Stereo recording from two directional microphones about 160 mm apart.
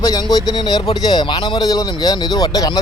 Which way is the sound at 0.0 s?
25° left (ahead or behind).